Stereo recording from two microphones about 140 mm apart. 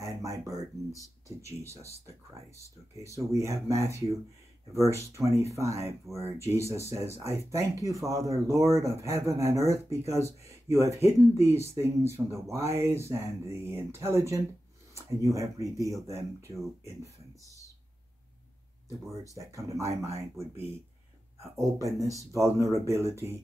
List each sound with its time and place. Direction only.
0.0 s a sound: 20° right (ahead or behind)
3.3 s speech: 20° right (ahead or behind)
19.3 s speech: 20° right (ahead or behind)